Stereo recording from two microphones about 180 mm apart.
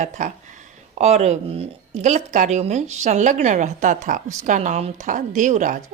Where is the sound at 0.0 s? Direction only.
45° right (ahead or behind).